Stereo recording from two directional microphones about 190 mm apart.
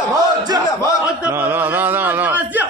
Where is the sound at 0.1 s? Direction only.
20° right (ahead or behind).